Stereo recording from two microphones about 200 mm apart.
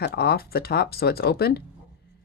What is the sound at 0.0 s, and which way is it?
Speech, 50° left (ahead or behind).